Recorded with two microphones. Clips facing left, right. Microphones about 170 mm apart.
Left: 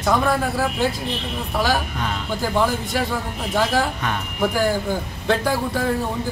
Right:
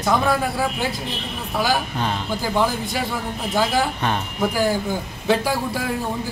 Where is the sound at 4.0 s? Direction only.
30° right (ahead or behind).